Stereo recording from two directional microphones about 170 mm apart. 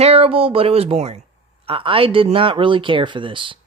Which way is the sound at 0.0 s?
35° right (ahead or behind).